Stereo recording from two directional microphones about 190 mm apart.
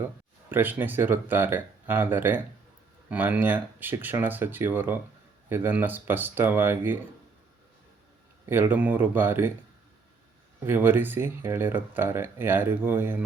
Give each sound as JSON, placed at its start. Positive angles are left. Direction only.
{"t": 0.5, "sound": "speech", "side_deg": -10}
{"t": 8.4, "sound": "speech", "side_deg": -10}
{"t": 10.6, "sound": "speech", "side_deg": -10}